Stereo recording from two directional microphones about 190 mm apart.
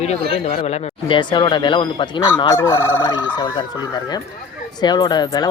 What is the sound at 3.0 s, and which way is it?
Speech, 25° left (ahead or behind).